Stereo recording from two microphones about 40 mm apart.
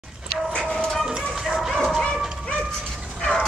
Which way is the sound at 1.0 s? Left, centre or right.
Centre.